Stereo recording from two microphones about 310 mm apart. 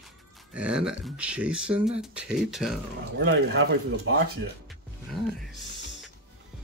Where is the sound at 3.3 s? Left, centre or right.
Right.